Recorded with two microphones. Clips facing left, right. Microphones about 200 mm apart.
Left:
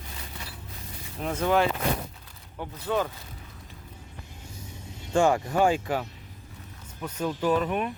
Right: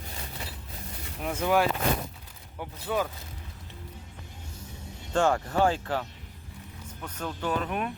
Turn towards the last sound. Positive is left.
turn(degrees=0)  # may be behind; listen again after turning